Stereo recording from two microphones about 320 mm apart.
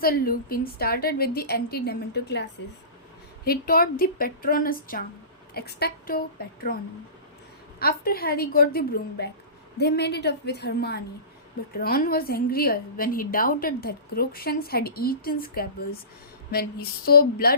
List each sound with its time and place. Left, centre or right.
0.0 s a woman's voice: left
7.8 s a woman's voice: left